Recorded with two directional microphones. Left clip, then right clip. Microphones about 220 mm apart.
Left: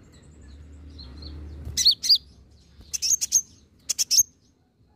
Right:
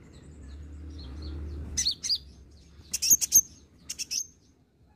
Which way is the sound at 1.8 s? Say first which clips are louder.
Left 9 dB; 30° left (ahead or behind).